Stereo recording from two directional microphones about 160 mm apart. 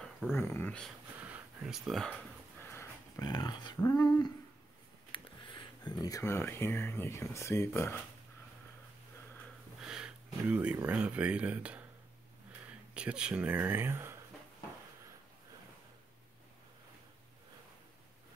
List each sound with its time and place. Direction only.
0.3 s speech: 15° left (ahead or behind)
1.2 s a sound: 10° right (ahead or behind)
2.6 s speech: 15° left (ahead or behind)
9.8 s speech: 5° right (ahead or behind)
12.9 s speech: 5° right (ahead or behind)